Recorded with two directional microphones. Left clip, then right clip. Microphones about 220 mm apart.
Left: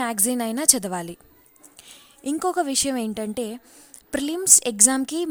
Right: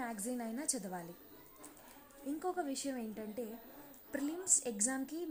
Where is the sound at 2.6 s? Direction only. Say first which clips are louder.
Left 16 dB; 60° left (ahead or behind).